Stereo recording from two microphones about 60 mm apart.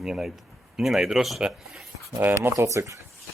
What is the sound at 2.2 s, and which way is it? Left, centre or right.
Speech, right.